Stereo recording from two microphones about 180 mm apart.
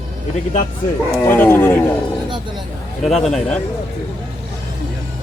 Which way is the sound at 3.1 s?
Centre (ahead or behind).